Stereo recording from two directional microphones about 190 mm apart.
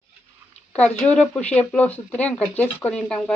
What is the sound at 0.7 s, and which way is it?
Speech, 5° left (ahead or behind).